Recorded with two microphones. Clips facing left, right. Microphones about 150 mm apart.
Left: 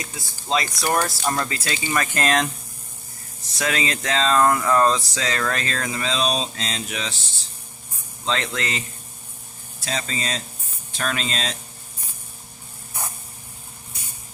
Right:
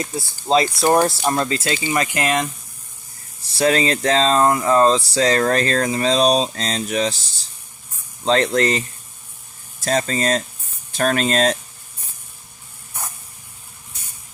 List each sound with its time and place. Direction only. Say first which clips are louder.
0.0 s speech: right 9 dB; 35° right (ahead or behind); by 2.5 s 10° right (ahead or behind)
3.5 s a sound: right 8 dB; 35° right (ahead or behind)
9.8 s speech: right 9 dB; 45° right (ahead or behind)